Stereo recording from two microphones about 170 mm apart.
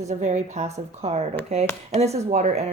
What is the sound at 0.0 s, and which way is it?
Speech, 45° right (ahead or behind).